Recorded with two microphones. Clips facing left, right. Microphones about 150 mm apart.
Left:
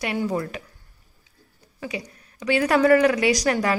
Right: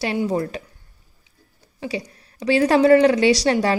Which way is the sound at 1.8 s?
30° right (ahead or behind).